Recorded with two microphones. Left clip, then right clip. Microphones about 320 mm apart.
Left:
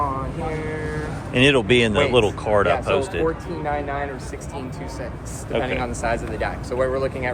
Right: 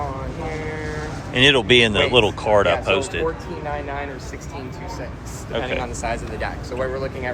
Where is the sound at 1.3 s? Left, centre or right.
Centre.